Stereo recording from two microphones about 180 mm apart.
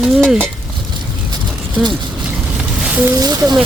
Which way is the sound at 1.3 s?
25° right (ahead or behind).